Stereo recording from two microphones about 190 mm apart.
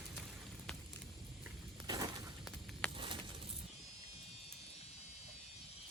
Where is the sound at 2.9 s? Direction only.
25° right (ahead or behind).